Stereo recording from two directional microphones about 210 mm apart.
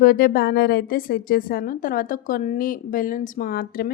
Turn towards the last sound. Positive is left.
turn(degrees=45)  # may be behind; listen again after turning